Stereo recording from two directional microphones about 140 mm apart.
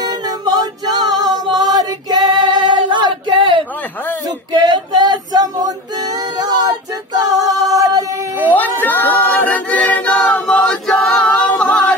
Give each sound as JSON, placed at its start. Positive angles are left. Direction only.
{"t": 0.0, "sound": "music", "side_deg": -30}
{"t": 1.5, "sound": "female singing", "side_deg": -30}
{"t": 4.5, "sound": "music", "side_deg": -30}
{"t": 7.2, "sound": "female singing", "side_deg": -25}
{"t": 7.7, "sound": "music", "side_deg": -25}
{"t": 8.5, "sound": "choir", "side_deg": 15}